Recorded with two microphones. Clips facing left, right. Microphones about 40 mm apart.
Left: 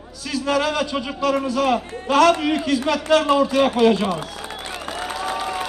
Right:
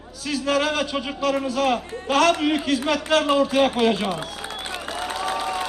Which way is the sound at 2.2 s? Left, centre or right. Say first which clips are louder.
Left 4 dB; centre.